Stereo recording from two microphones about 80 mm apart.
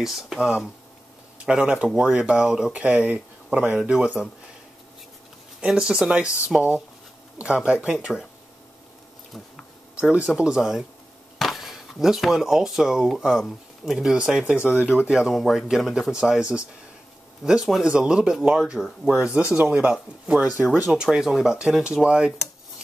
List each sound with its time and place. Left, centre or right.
0.0 s speech: centre
5.6 s speech: centre
6.2 s speech: left
7.3 s speech: centre
10.1 s speech: centre
21.0 s speech: centre